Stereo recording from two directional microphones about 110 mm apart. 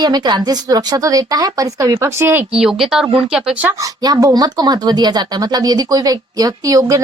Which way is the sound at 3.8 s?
35° right (ahead or behind).